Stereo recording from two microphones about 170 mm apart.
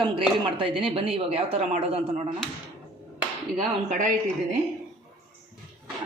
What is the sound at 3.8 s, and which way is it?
Speech, 50° right (ahead or behind).